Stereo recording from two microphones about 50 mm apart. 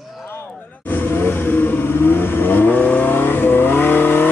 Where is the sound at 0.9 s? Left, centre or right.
Left.